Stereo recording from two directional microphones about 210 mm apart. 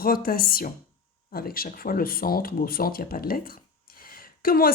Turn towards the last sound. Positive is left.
turn(degrees=45)  # may be behind; listen again after turning